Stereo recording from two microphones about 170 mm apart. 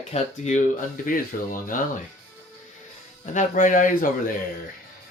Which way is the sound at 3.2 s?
50° left (ahead or behind).